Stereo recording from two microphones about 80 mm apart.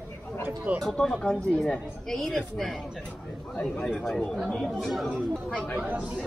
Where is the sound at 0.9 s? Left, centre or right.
Centre.